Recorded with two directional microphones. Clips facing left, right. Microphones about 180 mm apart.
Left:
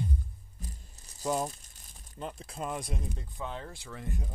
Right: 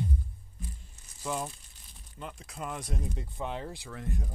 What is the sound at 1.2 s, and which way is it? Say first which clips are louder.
Speech: left 4 dB; 40° left (ahead or behind).